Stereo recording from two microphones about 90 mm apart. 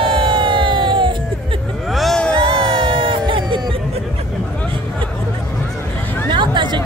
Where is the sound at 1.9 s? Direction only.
Centre (ahead or behind).